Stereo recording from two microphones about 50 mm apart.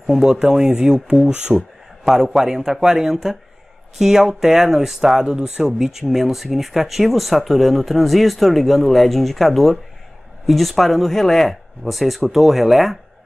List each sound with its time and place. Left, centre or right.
0.1 s a man's voice: centre
1.3 s speech: right
2.0 s a man's voice: centre